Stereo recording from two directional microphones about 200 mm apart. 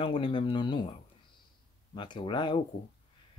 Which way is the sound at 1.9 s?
20° left (ahead or behind).